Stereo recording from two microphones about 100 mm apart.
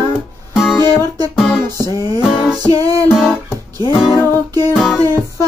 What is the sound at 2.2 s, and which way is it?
Music, 5° right (ahead or behind).